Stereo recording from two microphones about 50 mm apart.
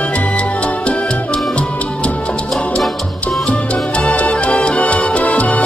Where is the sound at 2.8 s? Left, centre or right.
Centre.